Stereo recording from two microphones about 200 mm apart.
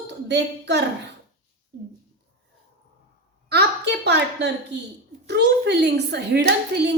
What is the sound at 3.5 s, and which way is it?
A woman's voice, 55° right (ahead or behind).